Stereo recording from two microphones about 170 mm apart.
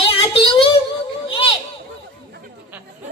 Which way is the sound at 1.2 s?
30° left (ahead or behind).